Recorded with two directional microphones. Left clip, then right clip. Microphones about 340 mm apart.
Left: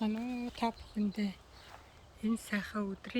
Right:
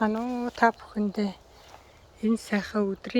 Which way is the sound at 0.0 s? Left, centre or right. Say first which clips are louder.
Right 11 dB; right.